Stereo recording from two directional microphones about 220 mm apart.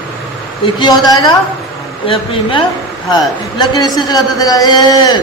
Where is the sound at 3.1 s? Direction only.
20° left (ahead or behind).